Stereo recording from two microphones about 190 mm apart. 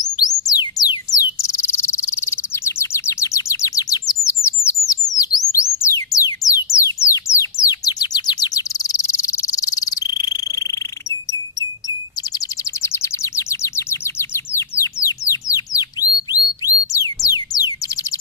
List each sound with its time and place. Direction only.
0.2 s cricket: 20° left (ahead or behind)
5.5 s music: 15° left (ahead or behind)
12.8 s bird: 15° left (ahead or behind)
15.5 s a sound: 20° left (ahead or behind)